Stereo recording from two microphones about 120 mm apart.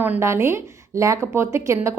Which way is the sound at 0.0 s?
20° right (ahead or behind).